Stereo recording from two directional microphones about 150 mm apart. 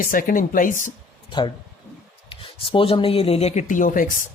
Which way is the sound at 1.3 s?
30° left (ahead or behind).